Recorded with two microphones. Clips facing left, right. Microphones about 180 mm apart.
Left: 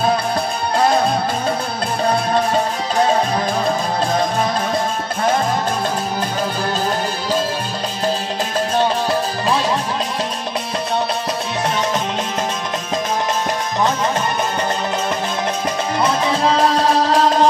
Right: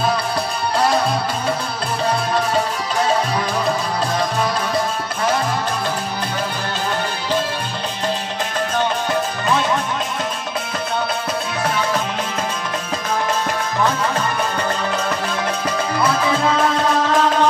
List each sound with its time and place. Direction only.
8.7 s music: 35° left (ahead or behind)
16.0 s music: 30° left (ahead or behind)